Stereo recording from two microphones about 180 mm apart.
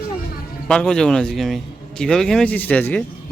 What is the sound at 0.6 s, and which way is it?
A man's voice, 5° left (ahead or behind).